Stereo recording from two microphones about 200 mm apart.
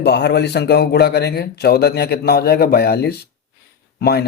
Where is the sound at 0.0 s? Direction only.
55° left (ahead or behind).